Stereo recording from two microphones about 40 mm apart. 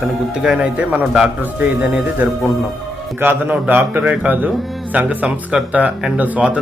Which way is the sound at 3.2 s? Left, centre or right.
Right.